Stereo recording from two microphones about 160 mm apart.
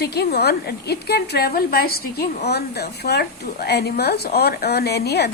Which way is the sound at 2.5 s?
90° left.